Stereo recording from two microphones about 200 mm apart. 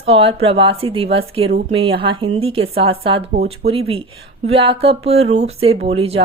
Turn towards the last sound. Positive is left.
turn(degrees=-30)  # may be behind; listen again after turning